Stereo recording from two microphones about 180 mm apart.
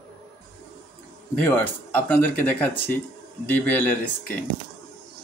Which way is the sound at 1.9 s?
10° left (ahead or behind).